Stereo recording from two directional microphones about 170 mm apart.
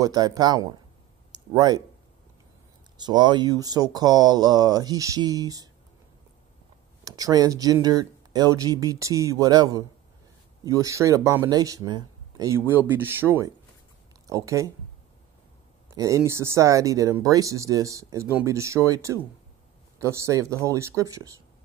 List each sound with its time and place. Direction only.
0.0 s speech: 20° right (ahead or behind)
3.0 s speech: 25° right (ahead or behind)
7.1 s speech: 20° right (ahead or behind)
15.9 s speech: 20° right (ahead or behind)